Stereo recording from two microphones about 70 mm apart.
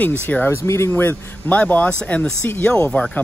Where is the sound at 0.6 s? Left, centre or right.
Left.